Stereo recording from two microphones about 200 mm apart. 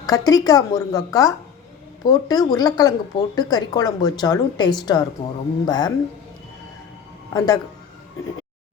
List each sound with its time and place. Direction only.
0.0 s a woman's voice: 20° left (ahead or behind)
7.3 s speech: 20° left (ahead or behind)